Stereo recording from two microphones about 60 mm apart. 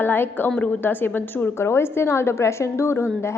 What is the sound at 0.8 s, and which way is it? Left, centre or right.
Speech, left.